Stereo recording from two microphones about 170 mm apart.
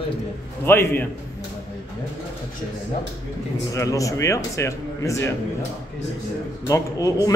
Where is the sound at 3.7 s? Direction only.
20° left (ahead or behind).